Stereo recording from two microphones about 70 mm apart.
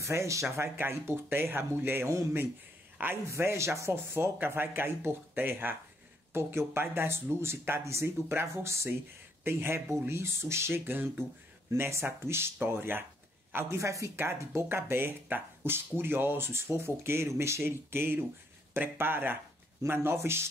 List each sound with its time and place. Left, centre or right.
0.0 s speech: right
0.7 s speech: right
3.3 s speech: right